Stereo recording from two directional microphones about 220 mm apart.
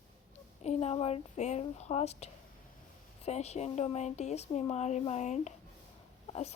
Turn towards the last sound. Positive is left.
turn(degrees=30)  # may be behind; listen again after turning